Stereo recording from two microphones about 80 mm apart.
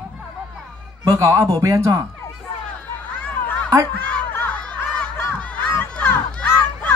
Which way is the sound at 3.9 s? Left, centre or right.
Centre.